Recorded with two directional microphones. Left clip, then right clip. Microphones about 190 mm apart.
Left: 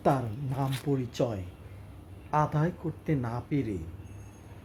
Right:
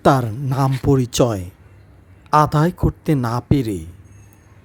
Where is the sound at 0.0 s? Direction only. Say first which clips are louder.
Right 12 dB; 35° right (ahead or behind).